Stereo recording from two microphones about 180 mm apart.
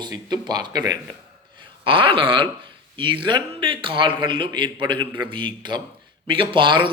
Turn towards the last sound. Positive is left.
turn(degrees=-25)  # may be behind; listen again after turning